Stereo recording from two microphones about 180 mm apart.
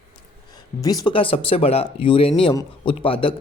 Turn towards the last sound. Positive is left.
turn(degrees=30)  # may be behind; listen again after turning